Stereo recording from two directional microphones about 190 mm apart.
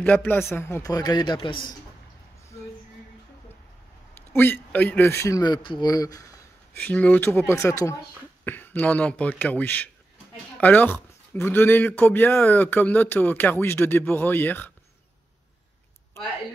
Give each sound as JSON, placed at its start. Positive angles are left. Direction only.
{"t": 0.0, "sound": "a man's voice", "side_deg": 10}
{"t": 4.3, "sound": "a man's voice", "side_deg": 10}
{"t": 6.7, "sound": "a man's voice", "side_deg": 10}